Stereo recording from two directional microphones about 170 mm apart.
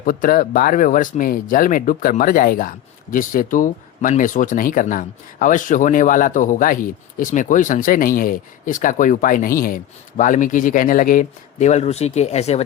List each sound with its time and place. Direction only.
0.0 s speech: 55° left (ahead or behind); by 12.6 s 40° left (ahead or behind)